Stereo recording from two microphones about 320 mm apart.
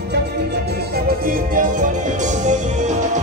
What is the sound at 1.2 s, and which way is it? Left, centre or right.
Music, right.